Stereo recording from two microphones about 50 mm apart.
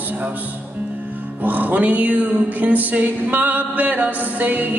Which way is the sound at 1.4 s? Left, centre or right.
Right.